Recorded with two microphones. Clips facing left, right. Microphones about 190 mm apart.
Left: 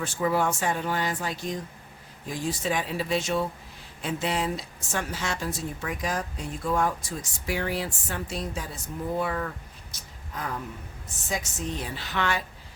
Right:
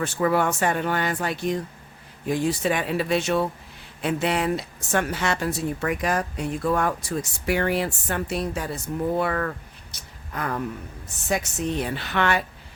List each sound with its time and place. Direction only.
0.0 s speech: 65° right (ahead or behind)
9.9 s a sound: 65° right (ahead or behind)
11.3 s speech: 65° right (ahead or behind)